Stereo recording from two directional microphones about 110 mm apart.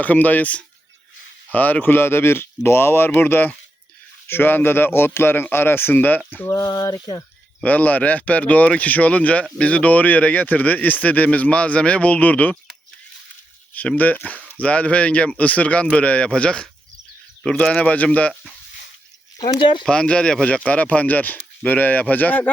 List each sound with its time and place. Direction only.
0.0 s speech: 15° left (ahead or behind)
6.7 s speech: 30° left (ahead or behind)
7.6 s speech: 15° left (ahead or behind)
13.7 s speech: 15° left (ahead or behind)
19.4 s speech: 45° left (ahead or behind)
19.8 s speech: 10° left (ahead or behind)